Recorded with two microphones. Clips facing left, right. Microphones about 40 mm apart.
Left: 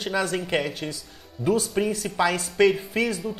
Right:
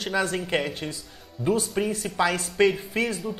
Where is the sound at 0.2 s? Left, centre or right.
Centre.